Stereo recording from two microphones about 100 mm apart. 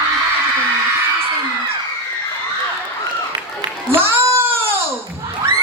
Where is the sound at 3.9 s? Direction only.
25° right (ahead or behind).